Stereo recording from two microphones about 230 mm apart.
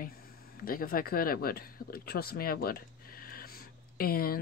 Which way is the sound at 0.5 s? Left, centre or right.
Left.